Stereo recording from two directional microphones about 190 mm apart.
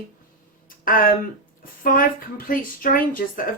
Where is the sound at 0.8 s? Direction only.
45° left (ahead or behind).